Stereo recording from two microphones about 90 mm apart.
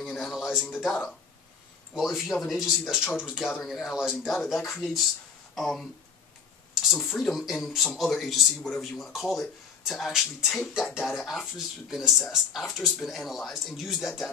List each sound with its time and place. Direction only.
0.1 s a sound: 5° right (ahead or behind)
2.0 s speech: centre (ahead or behind)
7.2 s speech: centre (ahead or behind)